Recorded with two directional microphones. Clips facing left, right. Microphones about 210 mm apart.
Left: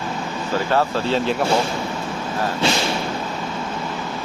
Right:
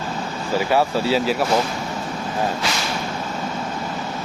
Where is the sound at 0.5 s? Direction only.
10° right (ahead or behind).